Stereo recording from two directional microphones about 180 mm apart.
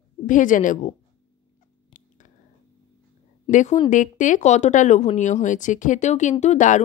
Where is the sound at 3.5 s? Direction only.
45° left (ahead or behind).